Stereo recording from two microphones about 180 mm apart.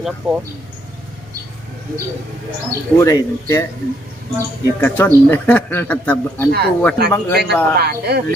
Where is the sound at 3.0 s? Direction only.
20° left (ahead or behind).